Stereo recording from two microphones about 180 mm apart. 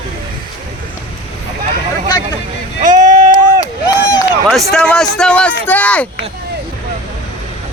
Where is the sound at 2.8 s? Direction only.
45° right (ahead or behind).